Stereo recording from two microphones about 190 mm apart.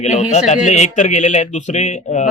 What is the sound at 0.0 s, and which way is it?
A man's voice, 40° left (ahead or behind).